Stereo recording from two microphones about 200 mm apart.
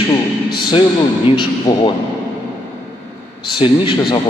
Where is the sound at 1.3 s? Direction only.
20° left (ahead or behind).